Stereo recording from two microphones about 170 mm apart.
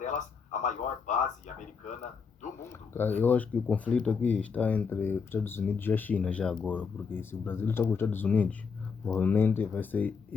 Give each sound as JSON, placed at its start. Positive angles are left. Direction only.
{"t": 0.0, "sound": "speech", "side_deg": 45}
{"t": 2.6, "sound": "speech", "side_deg": 15}